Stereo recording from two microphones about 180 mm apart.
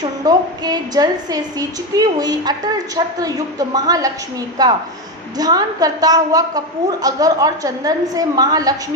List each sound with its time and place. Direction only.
0.0 s a woman's voice: 20° right (ahead or behind)